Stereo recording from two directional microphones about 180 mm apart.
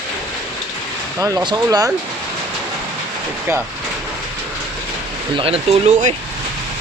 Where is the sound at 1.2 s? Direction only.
20° right (ahead or behind).